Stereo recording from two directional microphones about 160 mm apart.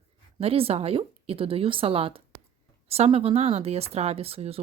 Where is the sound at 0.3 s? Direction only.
35° right (ahead or behind).